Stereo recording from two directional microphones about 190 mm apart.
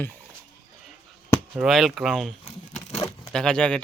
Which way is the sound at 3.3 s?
5° left (ahead or behind).